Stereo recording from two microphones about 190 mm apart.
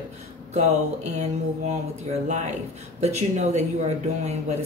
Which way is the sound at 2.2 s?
40° right (ahead or behind).